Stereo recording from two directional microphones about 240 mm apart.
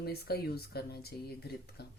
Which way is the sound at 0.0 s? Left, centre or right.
Left.